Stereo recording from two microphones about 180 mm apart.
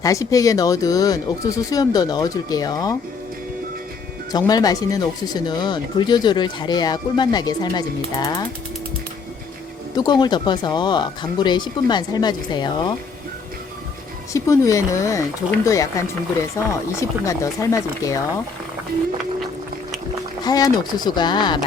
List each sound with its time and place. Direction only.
0.0 s speech: 20° left (ahead or behind)
4.3 s speech: 20° left (ahead or behind)
9.9 s speech: 25° left (ahead or behind)
14.3 s speech: 15° left (ahead or behind)
20.4 s speech: 20° left (ahead or behind)